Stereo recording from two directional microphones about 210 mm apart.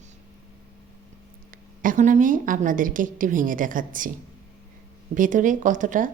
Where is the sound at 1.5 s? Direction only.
40° right (ahead or behind).